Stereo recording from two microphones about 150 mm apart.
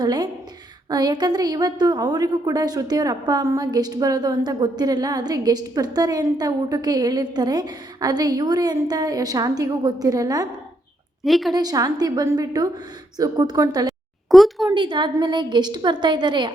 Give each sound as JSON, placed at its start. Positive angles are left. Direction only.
{"t": 0.0, "sound": "a woman's voice", "side_deg": -30}
{"t": 11.2, "sound": "speech", "side_deg": 0}
{"t": 11.5, "sound": "a woman's voice", "side_deg": -25}
{"t": 14.3, "sound": "speech", "side_deg": 0}
{"t": 14.7, "sound": "a woman's voice", "side_deg": -30}